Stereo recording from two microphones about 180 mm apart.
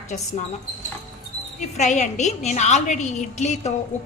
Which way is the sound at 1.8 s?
40° left (ahead or behind).